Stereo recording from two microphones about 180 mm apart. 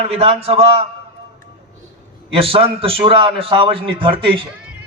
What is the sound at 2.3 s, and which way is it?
A man's voice, 30° right (ahead or behind).